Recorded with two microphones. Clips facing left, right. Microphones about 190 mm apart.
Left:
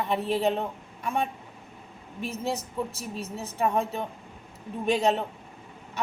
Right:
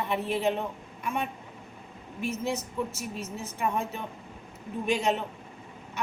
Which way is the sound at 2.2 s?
35° left (ahead or behind).